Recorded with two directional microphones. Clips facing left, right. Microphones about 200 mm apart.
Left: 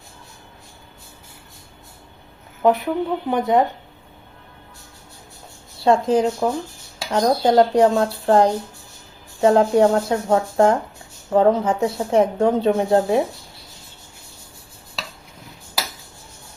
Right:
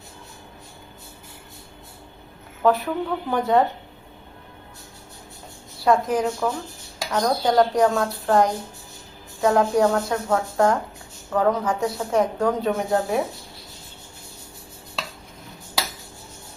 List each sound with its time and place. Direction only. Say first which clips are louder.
2.6 s speech: left 2 dB; 20° left (ahead or behind)
5.8 s speech: left 3 dB; 25° left (ahead or behind)